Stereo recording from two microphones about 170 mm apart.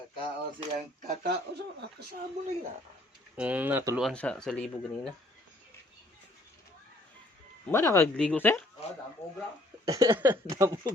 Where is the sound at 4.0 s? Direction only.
5° left (ahead or behind).